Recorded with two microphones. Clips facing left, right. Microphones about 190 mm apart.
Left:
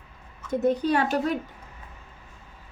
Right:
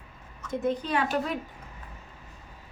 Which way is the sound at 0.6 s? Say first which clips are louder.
Left 5 dB; 40° left (ahead or behind).